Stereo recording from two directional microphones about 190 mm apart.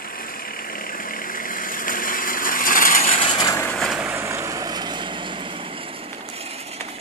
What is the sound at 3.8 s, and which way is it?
Vehicle, 5° right (ahead or behind).